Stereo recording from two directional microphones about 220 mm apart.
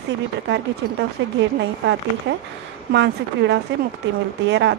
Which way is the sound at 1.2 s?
60° right (ahead or behind).